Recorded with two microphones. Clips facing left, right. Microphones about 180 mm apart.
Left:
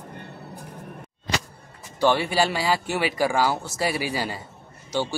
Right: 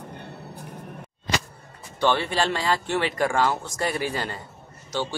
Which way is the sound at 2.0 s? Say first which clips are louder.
Left 2 dB; 10° left (ahead or behind).